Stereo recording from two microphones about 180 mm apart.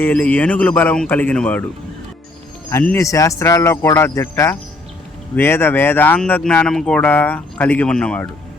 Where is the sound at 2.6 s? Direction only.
15° left (ahead or behind).